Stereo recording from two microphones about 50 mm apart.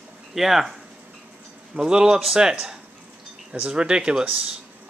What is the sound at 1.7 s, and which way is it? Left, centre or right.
Speech, centre.